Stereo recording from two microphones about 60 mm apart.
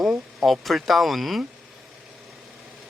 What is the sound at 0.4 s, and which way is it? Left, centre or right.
Speech, centre.